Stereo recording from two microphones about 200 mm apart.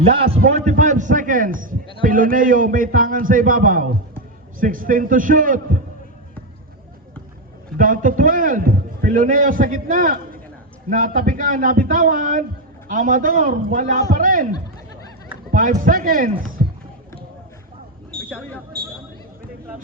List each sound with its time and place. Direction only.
0.0 s a man's voice: 30° right (ahead or behind)
0.4 s a man's voice: 40° right (ahead or behind)
7.8 s a man's voice: 45° right (ahead or behind)
15.5 s a man's voice: 40° right (ahead or behind)
18.1 s a sound: 5° left (ahead or behind)